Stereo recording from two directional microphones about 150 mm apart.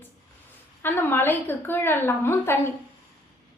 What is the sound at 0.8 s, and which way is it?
A woman's voice, 15° left (ahead or behind).